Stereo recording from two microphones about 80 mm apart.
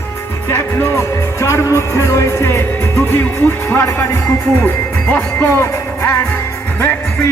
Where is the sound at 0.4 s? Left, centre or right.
Left.